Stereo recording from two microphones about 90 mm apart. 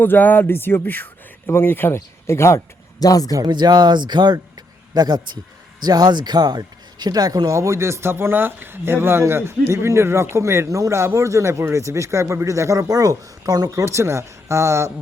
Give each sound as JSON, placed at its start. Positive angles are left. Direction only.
{"t": 0.0, "sound": "music", "side_deg": 20}
{"t": 2.2, "sound": "speech", "side_deg": 30}
{"t": 3.0, "sound": "speech", "side_deg": 45}
{"t": 3.3, "sound": "speech", "side_deg": -55}